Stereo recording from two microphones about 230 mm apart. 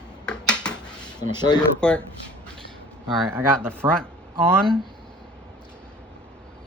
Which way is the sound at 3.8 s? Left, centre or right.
Centre.